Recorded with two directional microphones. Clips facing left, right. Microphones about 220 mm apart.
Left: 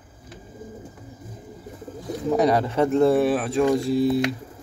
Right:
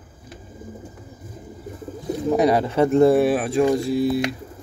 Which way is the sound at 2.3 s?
10° right (ahead or behind).